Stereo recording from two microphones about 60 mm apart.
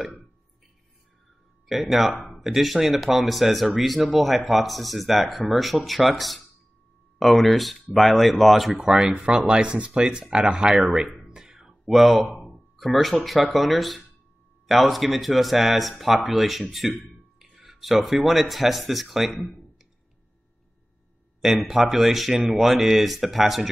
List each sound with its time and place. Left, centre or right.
1.7 s speech: centre
9.1 s speech: centre
11.2 s music: centre
12.7 s speech: centre
21.4 s speech: centre